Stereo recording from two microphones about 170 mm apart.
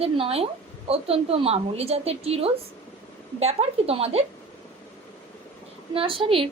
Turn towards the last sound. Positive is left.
turn(degrees=-30)  # may be behind; listen again after turning